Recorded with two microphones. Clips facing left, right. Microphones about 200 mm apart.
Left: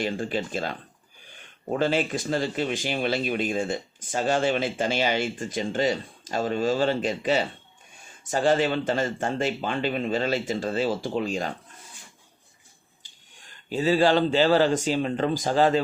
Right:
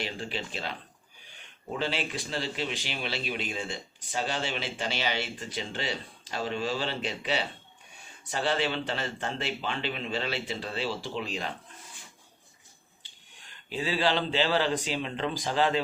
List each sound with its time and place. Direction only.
0.0 s speech: 50° left (ahead or behind)
13.4 s speech: 45° left (ahead or behind)